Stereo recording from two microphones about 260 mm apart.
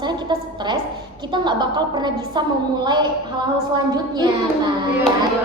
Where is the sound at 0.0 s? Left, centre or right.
Centre.